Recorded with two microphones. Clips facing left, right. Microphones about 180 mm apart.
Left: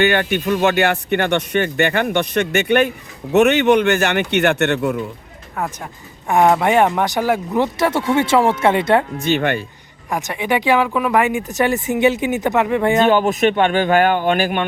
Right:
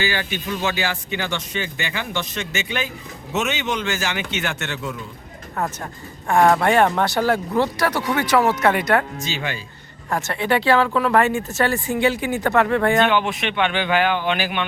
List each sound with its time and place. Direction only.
0.0 s speech: 60° left (ahead or behind)
5.5 s speech: 5° left (ahead or behind)
6.2 s speech: 15° left (ahead or behind)
9.1 s speech: 60° left (ahead or behind)
10.1 s speech: 15° left (ahead or behind)
13.1 s a man's voice: 40° left (ahead or behind)